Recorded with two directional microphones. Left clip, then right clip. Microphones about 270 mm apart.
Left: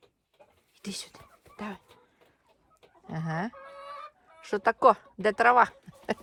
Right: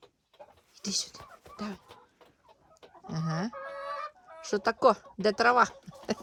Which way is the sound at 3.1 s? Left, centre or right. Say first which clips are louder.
Left 2 dB; centre.